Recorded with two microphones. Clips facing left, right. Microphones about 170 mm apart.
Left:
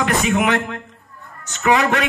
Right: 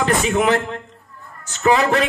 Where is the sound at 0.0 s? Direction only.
30° right (ahead or behind).